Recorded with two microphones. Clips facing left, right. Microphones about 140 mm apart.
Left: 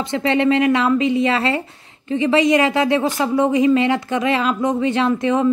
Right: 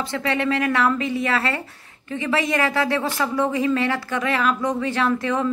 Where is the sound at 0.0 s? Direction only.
20° left (ahead or behind).